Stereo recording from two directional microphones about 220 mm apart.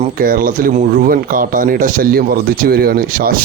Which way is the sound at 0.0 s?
40° right (ahead or behind).